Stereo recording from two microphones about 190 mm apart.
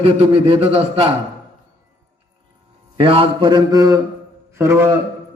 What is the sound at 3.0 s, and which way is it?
A man's voice, 30° right (ahead or behind).